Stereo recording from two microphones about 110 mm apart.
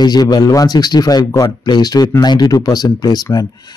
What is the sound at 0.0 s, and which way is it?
Speech, 40° left (ahead or behind).